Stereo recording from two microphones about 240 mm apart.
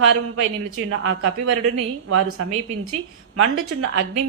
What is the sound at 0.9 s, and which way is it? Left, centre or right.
Speech, right.